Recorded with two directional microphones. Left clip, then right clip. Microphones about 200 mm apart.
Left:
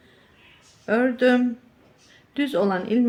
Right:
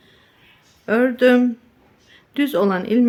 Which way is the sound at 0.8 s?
25° right (ahead or behind).